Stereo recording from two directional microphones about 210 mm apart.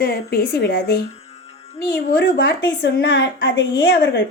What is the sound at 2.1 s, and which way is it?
A woman's voice, 55° left (ahead or behind).